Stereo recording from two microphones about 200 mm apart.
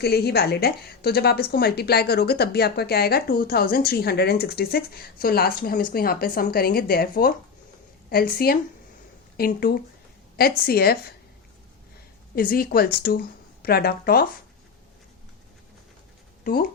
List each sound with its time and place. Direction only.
0.0 s a woman's voice: 50° left (ahead or behind)
12.4 s a woman's voice: 45° left (ahead or behind)
16.4 s speech: 50° left (ahead or behind)